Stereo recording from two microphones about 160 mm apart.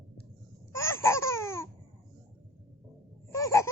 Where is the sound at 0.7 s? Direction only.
15° left (ahead or behind).